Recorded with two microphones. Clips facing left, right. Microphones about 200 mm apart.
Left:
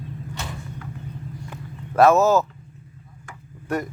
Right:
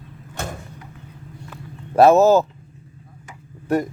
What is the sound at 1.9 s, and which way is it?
Speech, 30° right (ahead or behind).